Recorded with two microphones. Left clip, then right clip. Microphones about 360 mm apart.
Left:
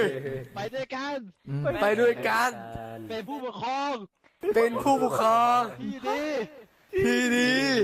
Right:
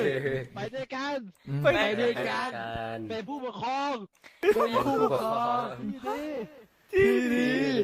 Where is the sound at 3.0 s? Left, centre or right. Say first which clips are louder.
Left 1 dB; centre.